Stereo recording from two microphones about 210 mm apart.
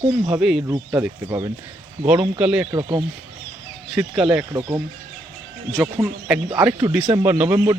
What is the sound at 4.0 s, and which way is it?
Speech, 5° right (ahead or behind).